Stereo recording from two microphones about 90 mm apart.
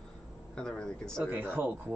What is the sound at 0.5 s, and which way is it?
Speech, 10° left (ahead or behind).